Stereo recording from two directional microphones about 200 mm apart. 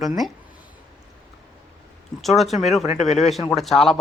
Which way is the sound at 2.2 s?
Centre (ahead or behind).